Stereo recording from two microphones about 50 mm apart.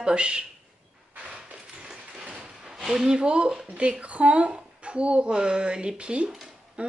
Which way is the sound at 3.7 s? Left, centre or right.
Right.